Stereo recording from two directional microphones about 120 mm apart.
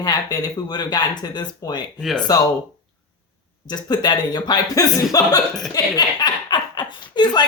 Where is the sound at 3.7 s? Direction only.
35° left (ahead or behind).